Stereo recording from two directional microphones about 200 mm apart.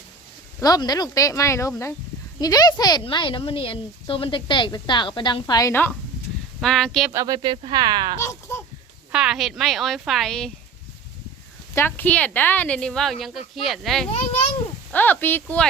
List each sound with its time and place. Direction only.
0.6 s a woman's voice: 20° left (ahead or behind)
6.6 s speech: centre (ahead or behind)
7.1 s speech: 15° right (ahead or behind)
8.2 s a sound: 15° left (ahead or behind)
9.1 s speech: centre (ahead or behind)
11.7 s speech: 10° left (ahead or behind)